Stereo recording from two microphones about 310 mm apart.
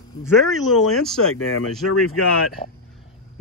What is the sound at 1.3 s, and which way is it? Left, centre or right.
Speech, left.